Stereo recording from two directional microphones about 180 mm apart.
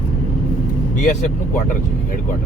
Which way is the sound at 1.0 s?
45° left (ahead or behind).